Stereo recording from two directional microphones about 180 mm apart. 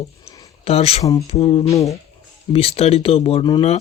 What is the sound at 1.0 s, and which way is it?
Speech, 20° left (ahead or behind).